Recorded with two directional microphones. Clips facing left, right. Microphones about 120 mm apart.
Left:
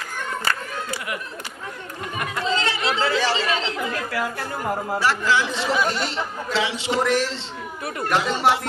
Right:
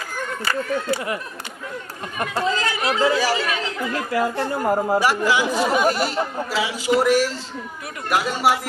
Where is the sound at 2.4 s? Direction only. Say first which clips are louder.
Even; 25° left (ahead or behind).